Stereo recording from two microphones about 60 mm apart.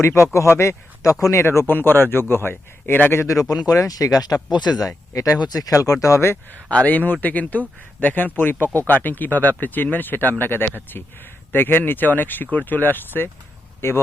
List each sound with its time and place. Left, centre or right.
0.0 s speech: left
1.6 s speech: left
3.7 s speech: left
4.8 s speech: left
6.7 s speech: left
13.8 s speech: left